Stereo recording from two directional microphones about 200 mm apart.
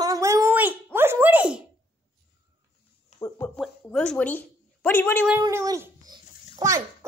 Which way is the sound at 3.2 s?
10° left (ahead or behind).